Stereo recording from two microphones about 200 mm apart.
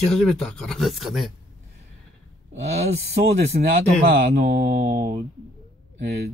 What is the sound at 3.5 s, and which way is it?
Mantra, 45° right (ahead or behind).